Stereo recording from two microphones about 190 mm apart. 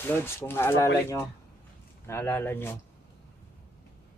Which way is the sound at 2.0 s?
10° left (ahead or behind).